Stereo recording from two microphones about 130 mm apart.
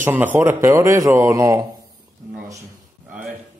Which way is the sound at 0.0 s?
15° right (ahead or behind).